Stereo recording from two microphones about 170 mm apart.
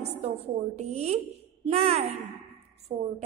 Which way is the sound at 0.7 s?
40° right (ahead or behind).